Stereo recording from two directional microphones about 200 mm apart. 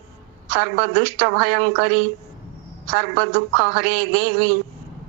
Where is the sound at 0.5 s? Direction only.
60° right (ahead or behind).